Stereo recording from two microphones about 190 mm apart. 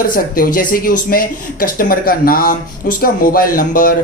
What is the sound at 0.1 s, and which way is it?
A man's voice, 45° left (ahead or behind).